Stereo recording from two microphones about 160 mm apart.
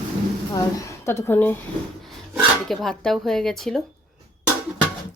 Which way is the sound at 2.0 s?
Centre (ahead or behind).